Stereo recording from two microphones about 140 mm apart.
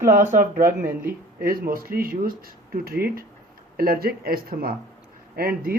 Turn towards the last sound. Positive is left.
turn(degrees=-90)